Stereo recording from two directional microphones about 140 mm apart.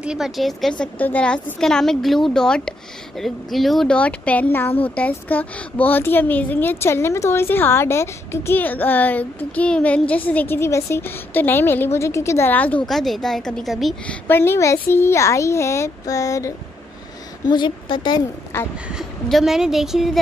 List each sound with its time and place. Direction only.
0.0 s a woman's voice: 5° right (ahead or behind)
14.2 s a woman's voice: 15° left (ahead or behind)
17.5 s a woman's voice: 35° left (ahead or behind)
18.9 s a woman's voice: centre (ahead or behind)